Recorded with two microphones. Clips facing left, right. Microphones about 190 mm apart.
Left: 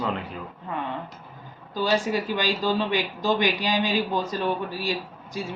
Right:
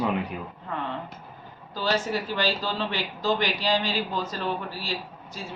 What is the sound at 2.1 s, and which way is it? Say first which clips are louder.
Speech: left 2 dB; 15° left (ahead or behind).